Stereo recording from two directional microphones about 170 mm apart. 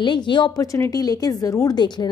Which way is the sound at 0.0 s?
25° left (ahead or behind).